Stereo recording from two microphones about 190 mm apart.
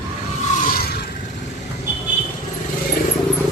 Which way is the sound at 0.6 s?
50° left (ahead or behind).